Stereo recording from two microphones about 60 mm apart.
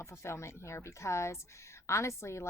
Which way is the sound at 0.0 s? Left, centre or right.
Left.